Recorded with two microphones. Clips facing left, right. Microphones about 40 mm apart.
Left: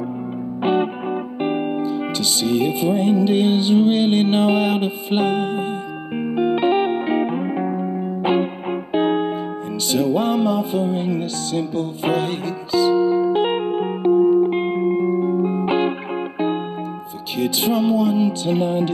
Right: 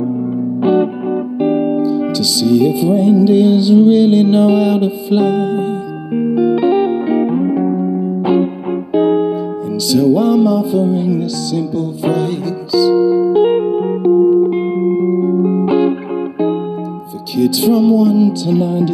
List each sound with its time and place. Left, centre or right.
0.6 s music: left
1.8 s music: left; by 7.9 s centre
8.2 s music: left
17.4 s music: left